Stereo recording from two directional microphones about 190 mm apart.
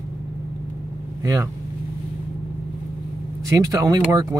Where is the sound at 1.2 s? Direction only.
15° right (ahead or behind).